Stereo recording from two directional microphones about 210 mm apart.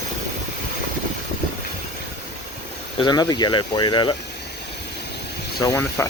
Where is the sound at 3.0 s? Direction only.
20° left (ahead or behind).